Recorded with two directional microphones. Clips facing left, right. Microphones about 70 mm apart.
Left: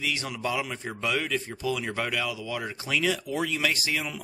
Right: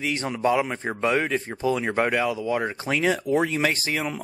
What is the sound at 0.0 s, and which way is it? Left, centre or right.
Speech, right.